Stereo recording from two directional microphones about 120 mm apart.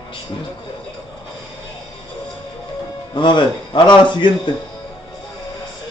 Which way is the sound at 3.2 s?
40° left (ahead or behind).